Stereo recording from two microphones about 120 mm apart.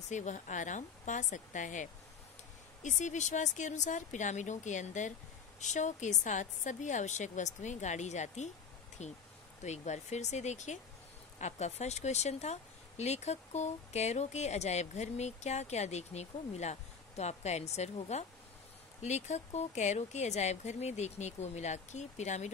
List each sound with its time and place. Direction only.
0.1 s a woman's voice: 90° left; by 22.5 s 75° left (ahead or behind)